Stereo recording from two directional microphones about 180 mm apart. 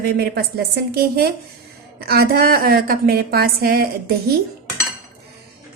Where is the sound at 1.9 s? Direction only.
60° right (ahead or behind).